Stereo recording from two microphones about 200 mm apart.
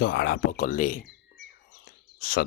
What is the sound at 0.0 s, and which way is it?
Speech, 55° left (ahead or behind).